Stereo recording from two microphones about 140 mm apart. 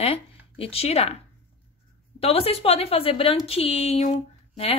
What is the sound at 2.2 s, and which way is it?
A woman's voice, 45° left (ahead or behind).